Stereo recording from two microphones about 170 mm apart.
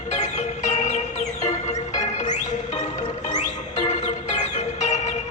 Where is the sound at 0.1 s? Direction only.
45° left (ahead or behind).